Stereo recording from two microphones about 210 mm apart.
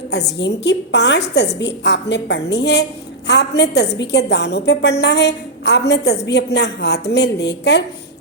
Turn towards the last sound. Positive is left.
turn(degrees=55)  # may be behind; listen again after turning